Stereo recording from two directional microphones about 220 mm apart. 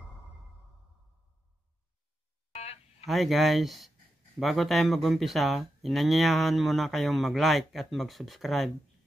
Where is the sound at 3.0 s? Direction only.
Centre (ahead or behind).